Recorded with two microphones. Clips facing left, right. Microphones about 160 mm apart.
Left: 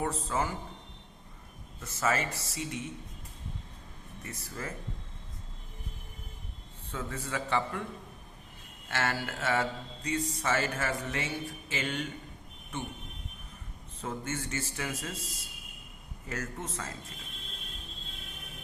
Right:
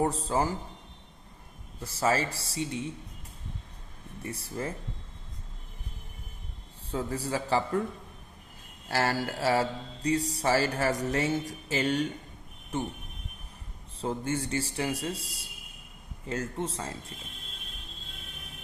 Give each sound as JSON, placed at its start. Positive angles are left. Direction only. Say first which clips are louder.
{"t": 0.0, "sound": "speech", "louder": "right 5 dB", "side_deg": -35}
{"t": 1.8, "sound": "speech", "louder": "right 3 dB", "side_deg": -30}
{"t": 4.2, "sound": "a man's voice", "louder": "right 6 dB", "side_deg": -30}
{"t": 6.9, "sound": "speech", "louder": "right 5 dB", "side_deg": -35}
{"t": 8.9, "sound": "speech", "louder": "right 4 dB", "side_deg": -35}
{"t": 14.0, "sound": "a man's voice", "louder": "right 5 dB", "side_deg": -30}